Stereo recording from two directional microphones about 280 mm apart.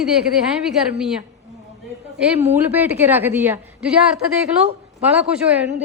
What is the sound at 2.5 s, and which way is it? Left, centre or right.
A woman's voice, centre.